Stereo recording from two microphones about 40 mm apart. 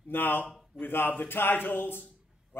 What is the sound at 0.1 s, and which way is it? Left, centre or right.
A man's voice, left.